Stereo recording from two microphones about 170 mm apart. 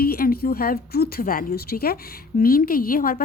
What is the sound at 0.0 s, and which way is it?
A woman's voice, 60° left (ahead or behind).